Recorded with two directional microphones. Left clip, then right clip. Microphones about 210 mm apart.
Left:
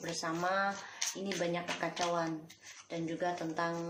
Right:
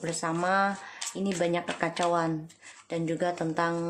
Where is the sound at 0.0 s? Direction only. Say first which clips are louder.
Right 6 dB; 45° right (ahead or behind).